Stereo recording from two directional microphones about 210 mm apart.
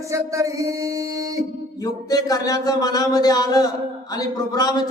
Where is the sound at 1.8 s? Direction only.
15° left (ahead or behind).